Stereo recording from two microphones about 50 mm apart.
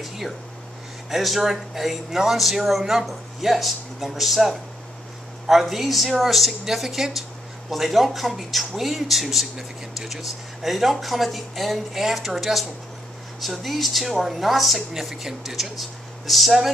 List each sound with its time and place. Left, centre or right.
1.1 s speech: centre